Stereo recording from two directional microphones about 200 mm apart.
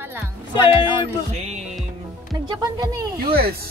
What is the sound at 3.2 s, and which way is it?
Speech, 50° right (ahead or behind).